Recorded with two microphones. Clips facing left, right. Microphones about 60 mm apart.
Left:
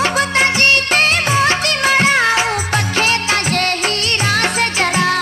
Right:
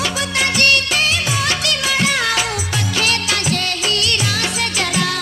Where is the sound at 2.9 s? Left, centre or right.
Left.